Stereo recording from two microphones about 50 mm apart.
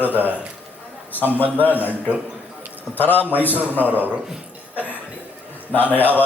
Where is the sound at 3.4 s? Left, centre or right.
Right.